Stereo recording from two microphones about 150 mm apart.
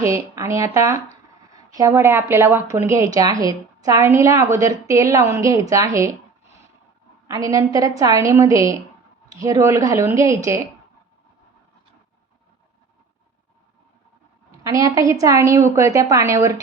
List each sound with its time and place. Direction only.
0.0 s a woman's voice: 20° right (ahead or behind)
7.3 s a woman's voice: 25° right (ahead or behind)
14.6 s a woman's voice: 20° right (ahead or behind)